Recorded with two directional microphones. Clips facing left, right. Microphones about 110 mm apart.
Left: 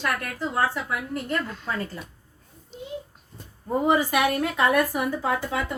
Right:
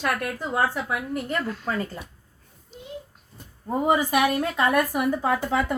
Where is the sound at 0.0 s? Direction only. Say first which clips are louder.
Right 1 dB; 15° right (ahead or behind).